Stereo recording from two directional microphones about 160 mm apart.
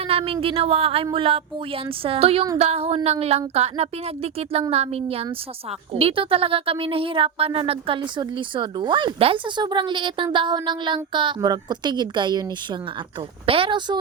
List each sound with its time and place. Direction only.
0.0 s a woman's voice: 35° right (ahead or behind)